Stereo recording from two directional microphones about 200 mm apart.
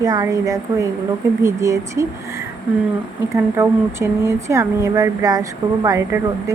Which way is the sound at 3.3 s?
15° right (ahead or behind).